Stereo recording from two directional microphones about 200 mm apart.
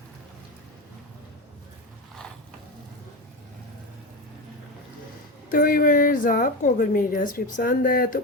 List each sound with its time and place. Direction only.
5.5 s a woman's voice: 45° left (ahead or behind)